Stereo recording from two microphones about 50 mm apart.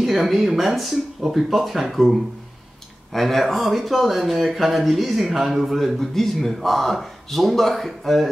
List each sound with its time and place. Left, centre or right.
0.0 s speech: centre